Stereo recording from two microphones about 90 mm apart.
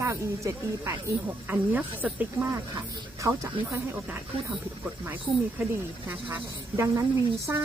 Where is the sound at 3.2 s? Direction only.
35° right (ahead or behind).